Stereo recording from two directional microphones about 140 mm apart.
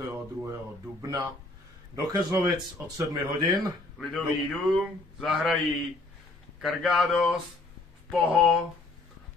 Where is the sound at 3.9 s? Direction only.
5° left (ahead or behind).